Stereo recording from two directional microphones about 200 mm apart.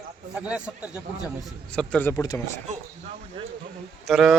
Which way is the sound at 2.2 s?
15° left (ahead or behind).